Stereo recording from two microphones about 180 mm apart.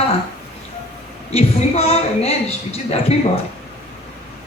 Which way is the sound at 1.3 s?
35° left (ahead or behind).